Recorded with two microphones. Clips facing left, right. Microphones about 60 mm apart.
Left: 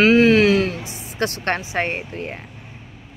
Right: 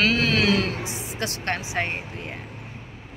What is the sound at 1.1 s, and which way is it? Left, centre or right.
Speech, left.